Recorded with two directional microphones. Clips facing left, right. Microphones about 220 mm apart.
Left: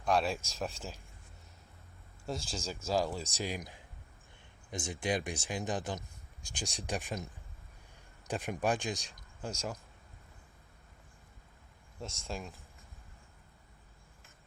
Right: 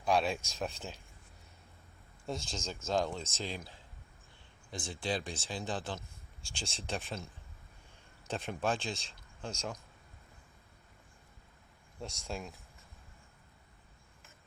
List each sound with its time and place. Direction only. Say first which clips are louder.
0.0 s speech: even; centre (ahead or behind)
2.2 s speech: left 1 dB; centre (ahead or behind)
8.3 s speech: left 2 dB; 15° left (ahead or behind)
12.2 s speech: even; centre (ahead or behind)